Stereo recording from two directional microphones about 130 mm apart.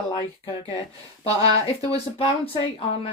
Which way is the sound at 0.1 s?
40° left (ahead or behind).